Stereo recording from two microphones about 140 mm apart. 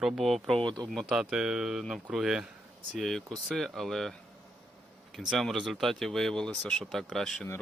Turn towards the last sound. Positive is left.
turn(degrees=5)  # may be behind; listen again after turning